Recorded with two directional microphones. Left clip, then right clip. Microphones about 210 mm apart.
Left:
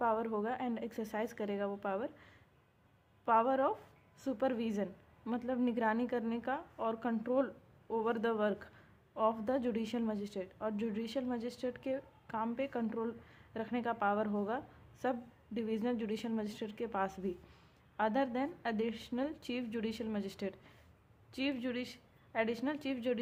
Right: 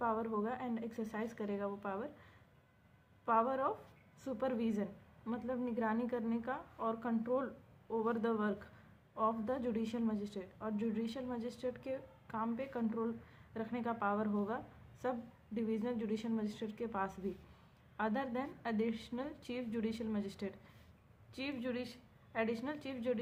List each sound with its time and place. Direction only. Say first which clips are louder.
0.0 s a woman's voice: left 3 dB; 30° left (ahead or behind)